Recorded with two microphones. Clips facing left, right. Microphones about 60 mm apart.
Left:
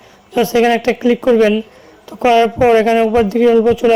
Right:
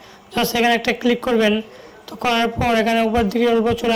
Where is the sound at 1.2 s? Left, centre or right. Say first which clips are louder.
Left 6 dB; centre.